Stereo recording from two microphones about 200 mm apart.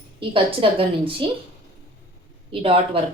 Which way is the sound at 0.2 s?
25° right (ahead or behind).